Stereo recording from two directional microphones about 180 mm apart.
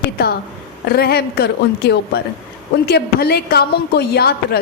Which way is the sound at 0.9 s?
60° left (ahead or behind).